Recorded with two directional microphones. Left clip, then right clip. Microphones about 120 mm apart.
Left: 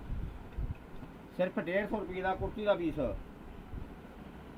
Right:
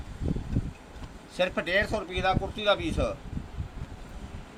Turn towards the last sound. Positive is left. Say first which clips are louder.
# right 5 dB
turn(degrees=-20)  # may be behind; listen again after turning